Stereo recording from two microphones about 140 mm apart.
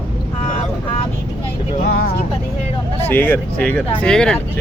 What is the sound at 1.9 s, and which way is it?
Speech, 90° left.